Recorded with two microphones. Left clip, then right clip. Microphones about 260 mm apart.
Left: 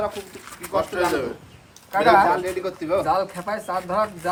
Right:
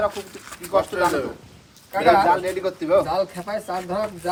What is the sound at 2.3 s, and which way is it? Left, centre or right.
Speech, centre.